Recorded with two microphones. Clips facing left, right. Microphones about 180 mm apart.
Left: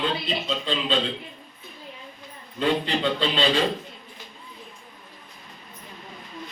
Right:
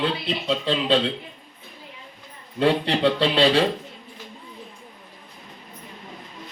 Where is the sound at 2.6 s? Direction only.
70° right (ahead or behind).